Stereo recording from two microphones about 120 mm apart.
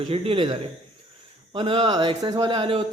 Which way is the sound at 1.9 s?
35° right (ahead or behind).